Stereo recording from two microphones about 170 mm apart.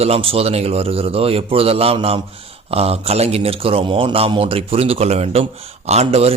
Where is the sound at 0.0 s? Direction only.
35° right (ahead or behind).